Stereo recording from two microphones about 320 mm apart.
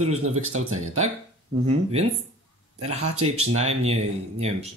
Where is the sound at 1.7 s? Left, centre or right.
Centre.